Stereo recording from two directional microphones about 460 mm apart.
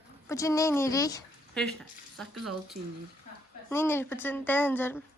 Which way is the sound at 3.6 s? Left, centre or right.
Centre.